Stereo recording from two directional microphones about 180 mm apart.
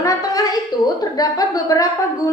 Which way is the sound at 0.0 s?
20° left (ahead or behind).